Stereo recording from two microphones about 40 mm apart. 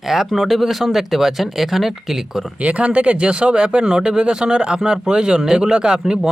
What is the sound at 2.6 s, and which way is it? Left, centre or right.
Speech, right.